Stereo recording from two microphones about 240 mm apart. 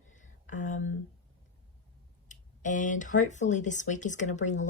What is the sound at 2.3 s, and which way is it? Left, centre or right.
Speech, left.